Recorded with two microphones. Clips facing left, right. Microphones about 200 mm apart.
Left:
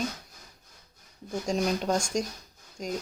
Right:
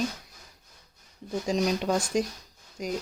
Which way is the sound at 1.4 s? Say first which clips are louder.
Right 1 dB; centre (ahead or behind).